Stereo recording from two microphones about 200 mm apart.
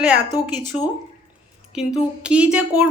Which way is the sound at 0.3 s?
20° left (ahead or behind).